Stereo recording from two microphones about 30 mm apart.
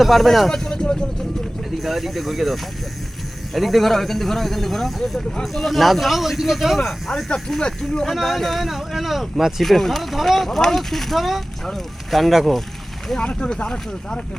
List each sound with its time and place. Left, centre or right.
0.0 s speech: centre
0.6 s speech: left
1.8 s speech: centre
7.3 s speech: centre
8.0 s speech: centre
13.1 s speech: left